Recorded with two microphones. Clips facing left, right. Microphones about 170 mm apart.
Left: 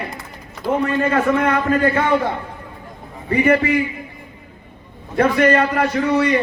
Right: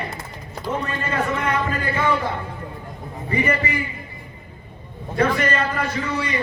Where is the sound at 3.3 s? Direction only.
60° left (ahead or behind).